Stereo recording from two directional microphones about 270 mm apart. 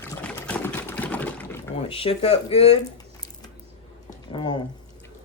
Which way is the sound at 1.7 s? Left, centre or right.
Left.